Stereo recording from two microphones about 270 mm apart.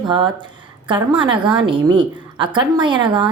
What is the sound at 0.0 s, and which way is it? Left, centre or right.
A woman's voice, centre.